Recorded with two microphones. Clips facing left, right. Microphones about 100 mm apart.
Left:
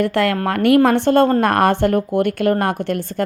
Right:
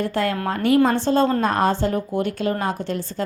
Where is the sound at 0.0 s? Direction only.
75° left (ahead or behind).